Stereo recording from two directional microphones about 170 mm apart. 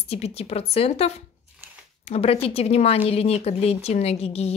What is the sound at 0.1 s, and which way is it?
Speech, 35° left (ahead or behind).